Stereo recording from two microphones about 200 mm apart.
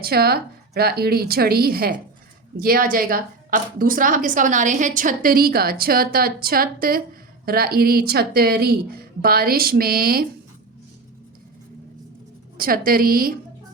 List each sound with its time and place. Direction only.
0.0 s a woman's voice: 50° right (ahead or behind)
12.5 s a woman's voice: 45° right (ahead or behind)